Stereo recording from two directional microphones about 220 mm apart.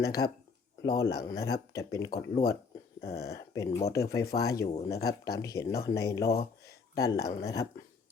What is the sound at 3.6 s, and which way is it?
Speech, 30° left (ahead or behind).